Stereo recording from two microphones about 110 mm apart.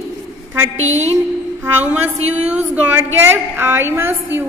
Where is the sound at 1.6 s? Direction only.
15° right (ahead or behind).